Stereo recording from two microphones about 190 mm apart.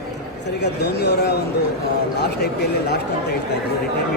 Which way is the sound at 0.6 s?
60° left (ahead or behind).